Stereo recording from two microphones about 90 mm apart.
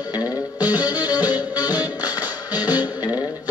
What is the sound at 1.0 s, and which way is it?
Music, 50° left (ahead or behind).